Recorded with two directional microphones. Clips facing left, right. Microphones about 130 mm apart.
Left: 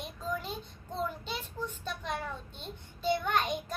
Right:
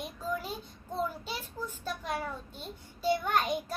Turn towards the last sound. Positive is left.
turn(degrees=-5)  # may be behind; listen again after turning